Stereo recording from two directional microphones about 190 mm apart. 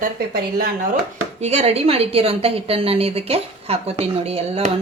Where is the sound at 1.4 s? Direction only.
35° right (ahead or behind).